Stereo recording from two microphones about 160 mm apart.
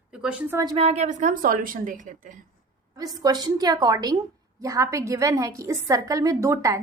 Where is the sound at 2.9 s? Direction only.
25° right (ahead or behind).